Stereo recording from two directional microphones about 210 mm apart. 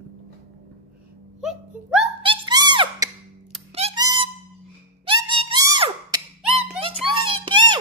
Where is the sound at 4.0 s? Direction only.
20° right (ahead or behind).